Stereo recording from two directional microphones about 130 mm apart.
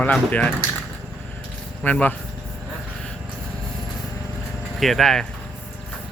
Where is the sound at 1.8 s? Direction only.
10° left (ahead or behind).